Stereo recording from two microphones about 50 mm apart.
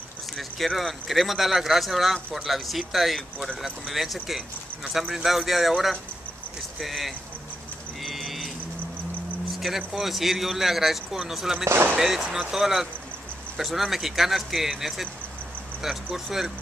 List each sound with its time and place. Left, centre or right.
0.4 s speech: centre
8.0 s livestock: centre
9.6 s speech: centre
11.6 s speech: right
12.0 s speech: centre